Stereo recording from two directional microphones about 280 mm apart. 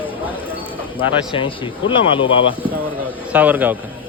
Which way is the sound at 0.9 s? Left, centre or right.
Centre.